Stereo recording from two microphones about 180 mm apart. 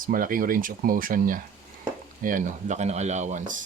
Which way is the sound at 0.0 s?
50° right (ahead or behind).